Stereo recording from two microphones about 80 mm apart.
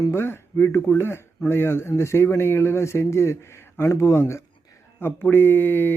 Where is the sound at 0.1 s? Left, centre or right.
Left.